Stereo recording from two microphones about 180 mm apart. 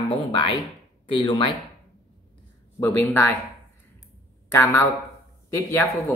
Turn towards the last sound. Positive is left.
turn(degrees=15)  # may be behind; listen again after turning